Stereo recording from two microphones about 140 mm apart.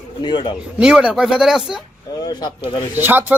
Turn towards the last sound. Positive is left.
turn(degrees=-15)  # may be behind; listen again after turning